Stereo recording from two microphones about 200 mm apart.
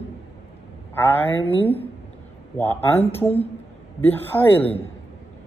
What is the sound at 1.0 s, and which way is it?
Speech, 10° left (ahead or behind).